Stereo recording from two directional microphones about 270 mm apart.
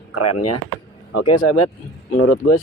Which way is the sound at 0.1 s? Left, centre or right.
Left.